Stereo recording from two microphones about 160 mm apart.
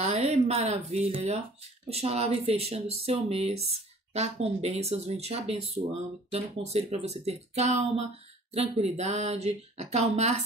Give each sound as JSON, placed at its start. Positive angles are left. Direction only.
{"t": 0.0, "sound": "a woman's voice", "side_deg": -45}